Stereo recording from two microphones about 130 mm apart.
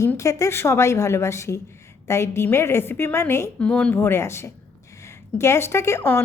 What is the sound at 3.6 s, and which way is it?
A woman's voice, 10° left (ahead or behind).